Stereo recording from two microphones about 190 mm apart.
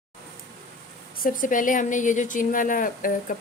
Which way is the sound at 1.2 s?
45° left (ahead or behind).